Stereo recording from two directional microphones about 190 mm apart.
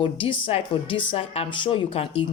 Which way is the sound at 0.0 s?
25° left (ahead or behind).